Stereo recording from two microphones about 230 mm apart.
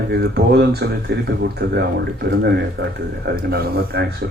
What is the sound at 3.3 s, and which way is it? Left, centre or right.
Speech, right.